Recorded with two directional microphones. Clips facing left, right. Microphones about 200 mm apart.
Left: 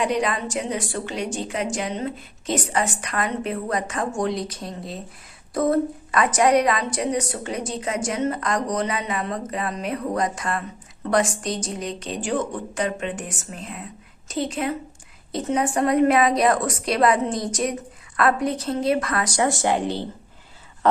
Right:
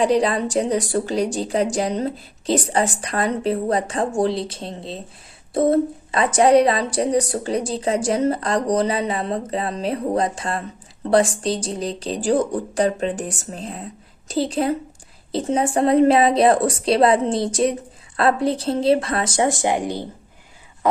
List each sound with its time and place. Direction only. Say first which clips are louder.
0.0 s a woman's voice: right 5 dB; 30° right (ahead or behind); by 21.0 s 10° right (ahead or behind)